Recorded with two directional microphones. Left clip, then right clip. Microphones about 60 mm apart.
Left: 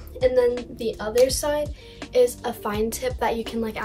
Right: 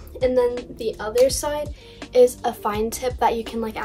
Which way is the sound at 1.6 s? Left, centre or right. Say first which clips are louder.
Left 1 dB; right.